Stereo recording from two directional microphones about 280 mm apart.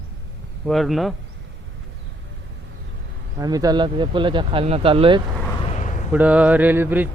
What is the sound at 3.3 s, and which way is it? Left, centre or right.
Speech, centre.